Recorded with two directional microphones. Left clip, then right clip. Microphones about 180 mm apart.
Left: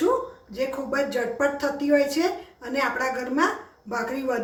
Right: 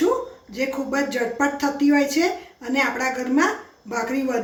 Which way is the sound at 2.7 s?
40° right (ahead or behind).